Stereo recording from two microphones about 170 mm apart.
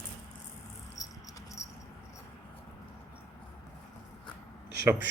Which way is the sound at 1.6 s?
45° left (ahead or behind).